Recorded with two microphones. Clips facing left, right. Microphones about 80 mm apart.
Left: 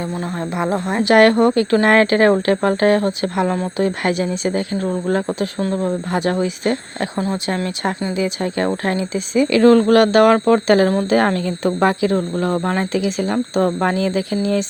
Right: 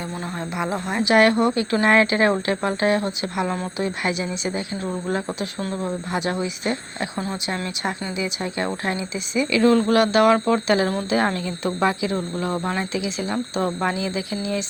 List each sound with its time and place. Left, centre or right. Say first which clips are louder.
0.5 s speech: left 5 dB; left
1.0 s speech: left 5 dB; left
3.4 s speech: left 6 dB; left
3.8 s speech: left 5 dB; left
7.2 s speech: left 7 dB; left
9.5 s speech: left 6 dB; left